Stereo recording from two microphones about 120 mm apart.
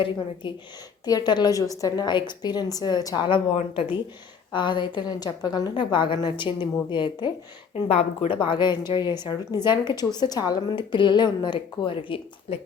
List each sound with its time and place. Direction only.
0.4 s a woman's voice: 45° left (ahead or behind)
3.2 s speech: 50° left (ahead or behind)
4.5 s a woman's voice: 40° left (ahead or behind)
7.9 s a woman's voice: 55° left (ahead or behind)